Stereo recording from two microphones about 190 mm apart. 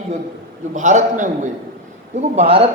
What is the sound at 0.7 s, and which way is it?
Speech, 40° right (ahead or behind).